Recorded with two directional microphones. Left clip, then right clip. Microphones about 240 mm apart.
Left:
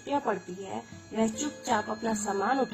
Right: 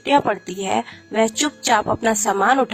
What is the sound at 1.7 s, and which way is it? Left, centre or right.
Speech, right.